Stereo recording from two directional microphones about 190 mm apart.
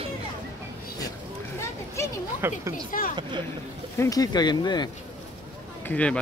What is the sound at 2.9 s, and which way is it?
Speech, 45° left (ahead or behind).